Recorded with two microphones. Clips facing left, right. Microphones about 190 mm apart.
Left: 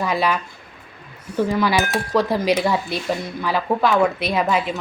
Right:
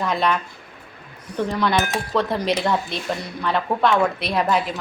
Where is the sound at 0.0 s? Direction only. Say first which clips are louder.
Left 1 dB; 5° left (ahead or behind).